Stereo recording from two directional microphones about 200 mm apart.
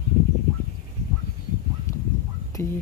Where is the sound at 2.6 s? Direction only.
10° left (ahead or behind).